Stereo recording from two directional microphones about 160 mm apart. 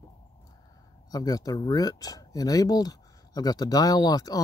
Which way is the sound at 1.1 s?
25° left (ahead or behind).